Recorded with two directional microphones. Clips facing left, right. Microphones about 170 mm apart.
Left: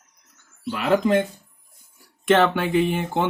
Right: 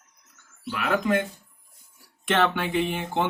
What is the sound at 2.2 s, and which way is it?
Speech, 40° left (ahead or behind).